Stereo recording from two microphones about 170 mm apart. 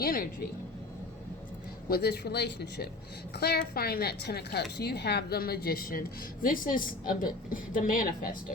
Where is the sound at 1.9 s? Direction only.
70° left (ahead or behind).